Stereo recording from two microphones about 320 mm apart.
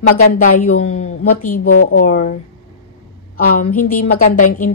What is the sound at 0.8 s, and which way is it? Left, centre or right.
Speech, left.